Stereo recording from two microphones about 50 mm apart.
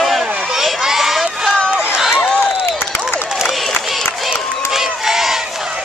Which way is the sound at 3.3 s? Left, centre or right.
Centre.